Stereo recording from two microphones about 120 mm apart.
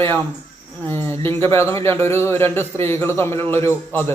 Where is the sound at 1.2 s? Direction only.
20° left (ahead or behind).